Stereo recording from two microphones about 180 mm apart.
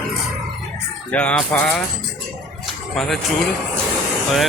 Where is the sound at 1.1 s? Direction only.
5° left (ahead or behind).